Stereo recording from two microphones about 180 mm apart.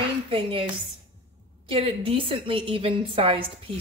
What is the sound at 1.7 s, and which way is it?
A woman's voice, 30° right (ahead or behind).